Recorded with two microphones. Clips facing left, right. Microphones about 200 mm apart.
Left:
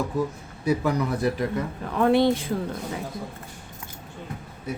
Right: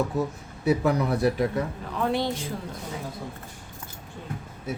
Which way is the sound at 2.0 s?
60° left (ahead or behind).